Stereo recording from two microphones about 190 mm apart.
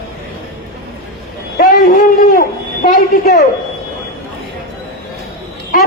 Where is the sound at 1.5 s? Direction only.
45° left (ahead or behind).